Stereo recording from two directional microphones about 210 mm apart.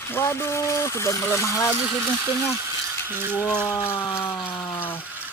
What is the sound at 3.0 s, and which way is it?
Speech, 10° right (ahead or behind).